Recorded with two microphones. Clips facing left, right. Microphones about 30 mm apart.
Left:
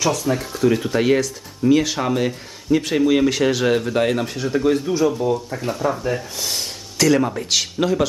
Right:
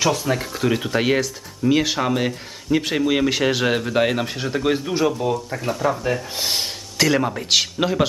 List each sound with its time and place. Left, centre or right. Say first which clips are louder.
0.0 s a man's voice: even; right
5.3 s a man's voice: left 1 dB; centre
6.3 s a man's voice: right 2 dB; right
7.0 s a man's voice: left 2 dB; centre